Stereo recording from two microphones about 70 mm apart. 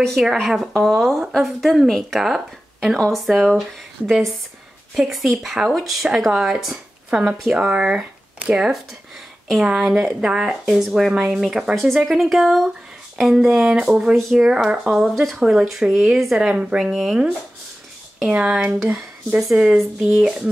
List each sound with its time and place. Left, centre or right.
0.0 s speech: centre